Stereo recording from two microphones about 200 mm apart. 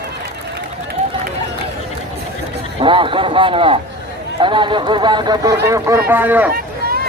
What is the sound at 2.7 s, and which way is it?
Speech, 25° right (ahead or behind).